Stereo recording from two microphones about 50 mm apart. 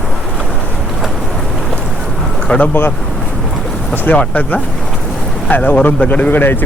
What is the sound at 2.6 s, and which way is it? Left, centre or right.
Speech, left.